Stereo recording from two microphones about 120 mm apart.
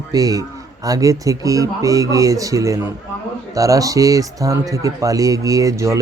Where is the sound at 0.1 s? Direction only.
30° right (ahead or behind).